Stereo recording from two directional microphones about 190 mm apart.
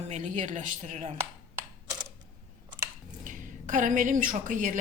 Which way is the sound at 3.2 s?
45° right (ahead or behind).